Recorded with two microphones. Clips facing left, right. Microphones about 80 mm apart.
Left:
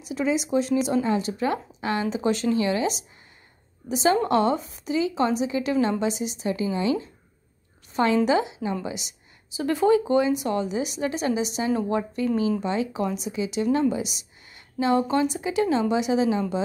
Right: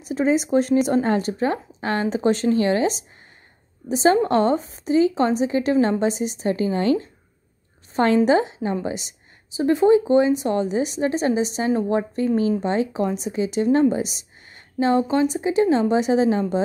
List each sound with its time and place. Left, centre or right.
0.0 s speech: right
1.4 s a woman's voice: right
9.6 s speech: right